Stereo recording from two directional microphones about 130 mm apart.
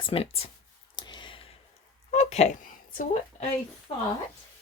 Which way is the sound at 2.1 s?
60° left (ahead or behind).